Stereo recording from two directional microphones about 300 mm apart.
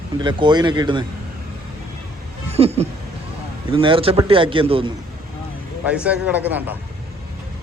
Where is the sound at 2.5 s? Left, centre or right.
Centre.